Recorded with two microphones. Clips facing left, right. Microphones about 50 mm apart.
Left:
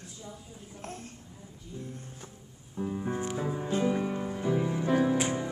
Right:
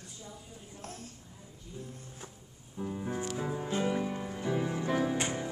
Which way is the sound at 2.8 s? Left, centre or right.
Centre.